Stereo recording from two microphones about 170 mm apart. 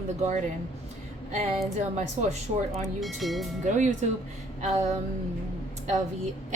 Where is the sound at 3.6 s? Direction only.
45° right (ahead or behind).